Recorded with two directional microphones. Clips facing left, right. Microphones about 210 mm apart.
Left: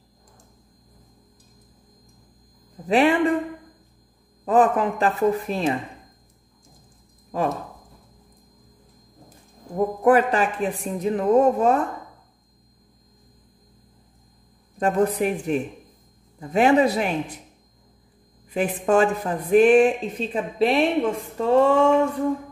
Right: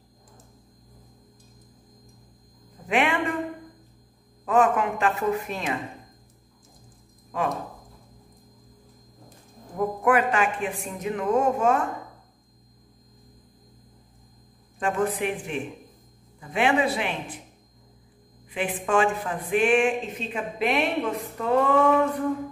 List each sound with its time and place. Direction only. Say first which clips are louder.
2.9 s a woman's voice: left 6 dB; 35° left (ahead or behind)
4.5 s a woman's voice: left 3 dB; 35° left (ahead or behind)
9.8 s a woman's voice: left 5 dB; 35° left (ahead or behind)
14.8 s a woman's voice: left 5 dB; 40° left (ahead or behind)
18.5 s a woman's voice: left 5 dB; 40° left (ahead or behind)